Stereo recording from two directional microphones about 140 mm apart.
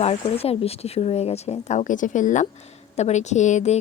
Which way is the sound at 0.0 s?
50° left (ahead or behind).